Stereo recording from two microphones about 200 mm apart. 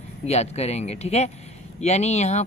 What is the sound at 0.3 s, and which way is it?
Speech, 30° left (ahead or behind).